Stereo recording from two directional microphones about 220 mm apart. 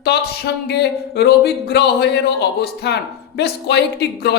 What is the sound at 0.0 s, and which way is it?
Speech, 50° left (ahead or behind).